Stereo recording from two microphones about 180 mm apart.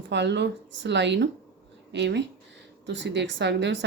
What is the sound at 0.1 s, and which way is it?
Speech, 75° right (ahead or behind).